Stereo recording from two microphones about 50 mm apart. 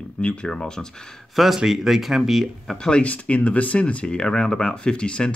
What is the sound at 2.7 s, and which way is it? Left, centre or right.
Speech, centre.